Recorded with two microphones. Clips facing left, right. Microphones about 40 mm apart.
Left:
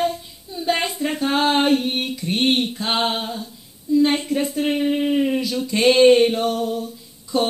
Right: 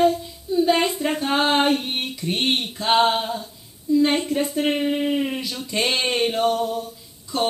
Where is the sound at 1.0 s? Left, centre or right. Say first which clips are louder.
Even; centre.